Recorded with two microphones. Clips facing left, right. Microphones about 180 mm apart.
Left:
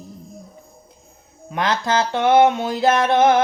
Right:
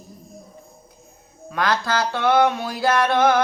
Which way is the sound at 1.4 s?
20° left (ahead or behind).